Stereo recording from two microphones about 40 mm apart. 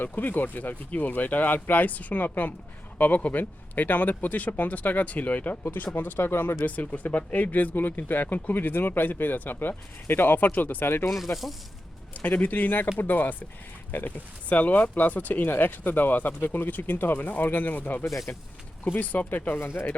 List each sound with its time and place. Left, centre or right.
0.0 s speech: left
6.1 s speech: left
6.7 s speech: left
11.1 s speech: centre
12.1 s speech: left
17.2 s speech: left
19.5 s speech: left